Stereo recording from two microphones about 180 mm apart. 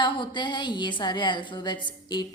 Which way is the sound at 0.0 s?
25° left (ahead or behind).